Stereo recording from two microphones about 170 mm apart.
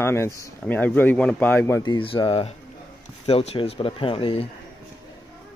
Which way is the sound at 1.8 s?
30° left (ahead or behind).